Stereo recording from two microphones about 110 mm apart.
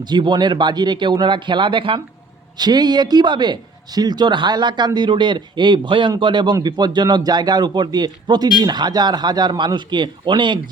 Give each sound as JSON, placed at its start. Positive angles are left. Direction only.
{"t": 0.0, "sound": "speech", "side_deg": -40}
{"t": 2.6, "sound": "speech", "side_deg": -40}